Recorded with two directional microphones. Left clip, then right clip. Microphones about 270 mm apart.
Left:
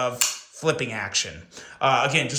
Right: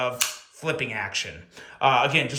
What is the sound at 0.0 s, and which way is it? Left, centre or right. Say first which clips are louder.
A man's voice: left 1 dB; centre.